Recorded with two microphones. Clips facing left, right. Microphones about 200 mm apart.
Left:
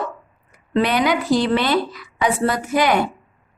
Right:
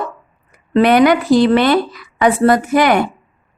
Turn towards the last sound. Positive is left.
turn(degrees=-60)  # may be behind; listen again after turning